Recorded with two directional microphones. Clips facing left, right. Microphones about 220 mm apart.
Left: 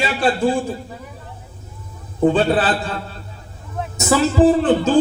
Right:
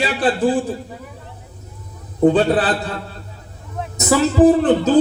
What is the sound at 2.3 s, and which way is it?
Speech, 40° right (ahead or behind).